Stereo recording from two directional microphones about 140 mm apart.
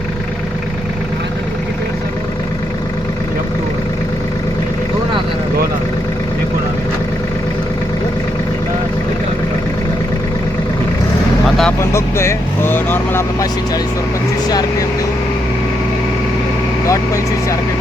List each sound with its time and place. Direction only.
11.4 s vehicle: centre (ahead or behind)
11.8 s vehicle: 20° left (ahead or behind)
14.4 s speech: 30° left (ahead or behind)